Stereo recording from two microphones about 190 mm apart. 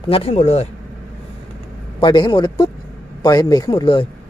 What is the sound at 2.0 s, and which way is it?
A man's voice, 25° left (ahead or behind).